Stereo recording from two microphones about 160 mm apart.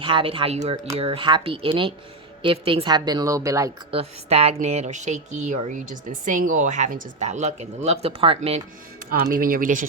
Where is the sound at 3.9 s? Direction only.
40° right (ahead or behind).